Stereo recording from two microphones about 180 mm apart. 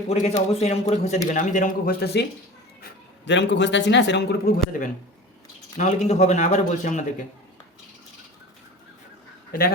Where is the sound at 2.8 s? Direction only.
80° left; by 4.8 s 60° left (ahead or behind).